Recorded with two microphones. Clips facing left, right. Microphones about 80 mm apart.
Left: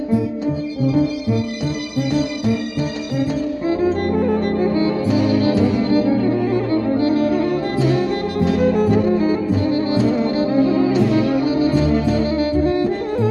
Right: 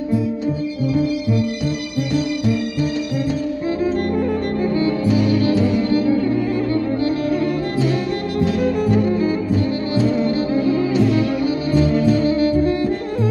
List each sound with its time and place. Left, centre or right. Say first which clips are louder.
0.8 s music: left 2 dB; left